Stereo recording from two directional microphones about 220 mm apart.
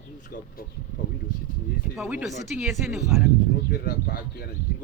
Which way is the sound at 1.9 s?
5° right (ahead or behind).